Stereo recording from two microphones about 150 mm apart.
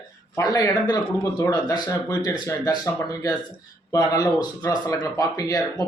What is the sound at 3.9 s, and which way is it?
A man's voice, 25° left (ahead or behind).